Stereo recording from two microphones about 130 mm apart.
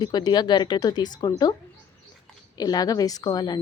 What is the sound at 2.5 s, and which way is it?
Speech, 30° left (ahead or behind).